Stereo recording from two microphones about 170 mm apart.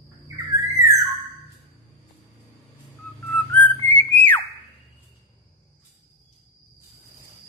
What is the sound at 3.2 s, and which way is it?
Whistling, 10° left (ahead or behind).